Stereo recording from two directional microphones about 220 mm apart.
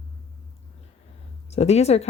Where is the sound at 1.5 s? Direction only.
30° left (ahead or behind).